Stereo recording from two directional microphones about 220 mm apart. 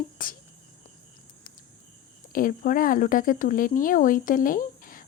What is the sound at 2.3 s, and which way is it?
Speech, 40° left (ahead or behind).